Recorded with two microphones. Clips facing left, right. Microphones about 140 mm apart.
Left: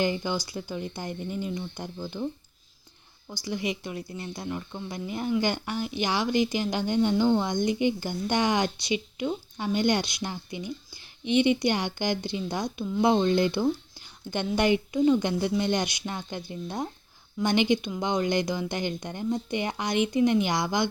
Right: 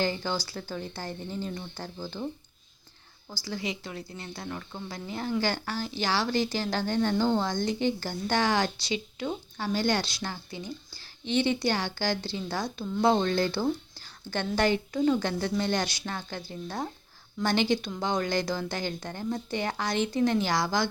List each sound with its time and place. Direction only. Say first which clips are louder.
0.0 s a woman's voice: left 2 dB; 15° left (ahead or behind)
3.3 s a woman's voice: left 3 dB; 20° left (ahead or behind)